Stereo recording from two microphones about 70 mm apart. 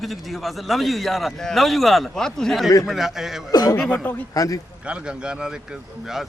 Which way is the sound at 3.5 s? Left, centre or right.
Left.